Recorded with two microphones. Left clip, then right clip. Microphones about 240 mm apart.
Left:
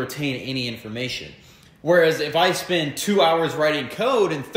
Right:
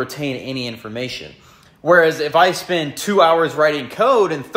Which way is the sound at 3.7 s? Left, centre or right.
Centre.